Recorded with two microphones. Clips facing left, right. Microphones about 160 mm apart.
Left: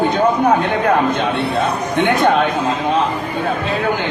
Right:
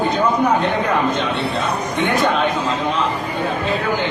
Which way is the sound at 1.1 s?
55° left (ahead or behind).